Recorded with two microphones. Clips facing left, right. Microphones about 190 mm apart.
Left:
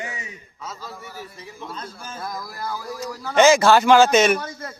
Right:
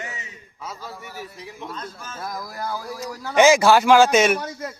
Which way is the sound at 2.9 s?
10° right (ahead or behind).